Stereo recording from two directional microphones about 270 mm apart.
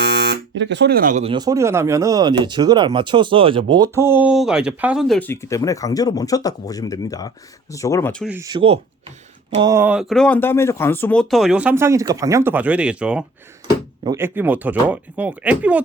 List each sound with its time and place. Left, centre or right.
0.0 s speech: right; by 8.3 s centre
8.3 s speech: centre